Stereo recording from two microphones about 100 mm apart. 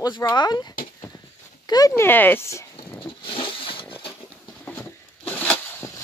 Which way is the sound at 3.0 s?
60° left (ahead or behind).